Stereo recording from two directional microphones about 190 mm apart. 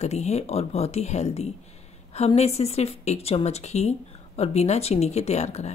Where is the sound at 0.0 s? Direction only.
35° left (ahead or behind).